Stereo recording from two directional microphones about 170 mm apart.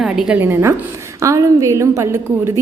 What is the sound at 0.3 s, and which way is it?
A woman's voice, 15° right (ahead or behind).